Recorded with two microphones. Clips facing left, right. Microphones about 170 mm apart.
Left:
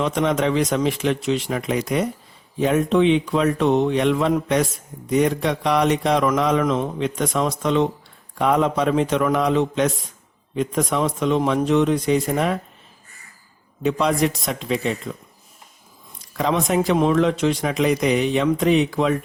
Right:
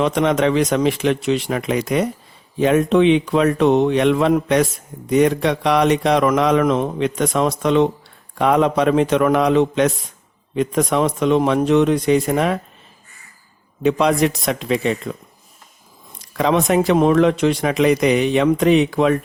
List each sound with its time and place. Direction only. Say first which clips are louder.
0.0 s speech: right 4 dB; 70° right (ahead or behind)
13.8 s speech: right 4 dB; 70° right (ahead or behind)
16.4 s speech: right 4 dB; 70° right (ahead or behind)